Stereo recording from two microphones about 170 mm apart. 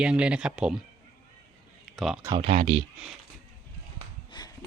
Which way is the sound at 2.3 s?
35° right (ahead or behind).